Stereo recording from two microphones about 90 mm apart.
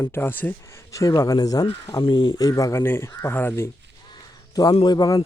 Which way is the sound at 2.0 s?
60° left (ahead or behind).